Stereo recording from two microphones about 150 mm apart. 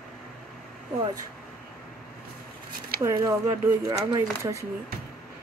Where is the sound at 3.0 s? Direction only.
20° right (ahead or behind).